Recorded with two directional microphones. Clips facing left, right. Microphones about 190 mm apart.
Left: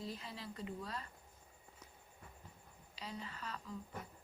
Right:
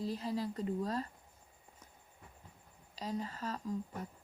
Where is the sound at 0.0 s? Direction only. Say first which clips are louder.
Right 10 dB; 40° right (ahead or behind).